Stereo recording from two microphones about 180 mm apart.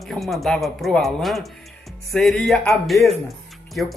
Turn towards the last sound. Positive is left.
turn(degrees=0)  # may be behind; listen again after turning